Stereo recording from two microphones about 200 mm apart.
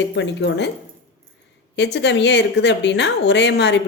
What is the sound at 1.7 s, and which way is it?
Speech, 60° left (ahead or behind).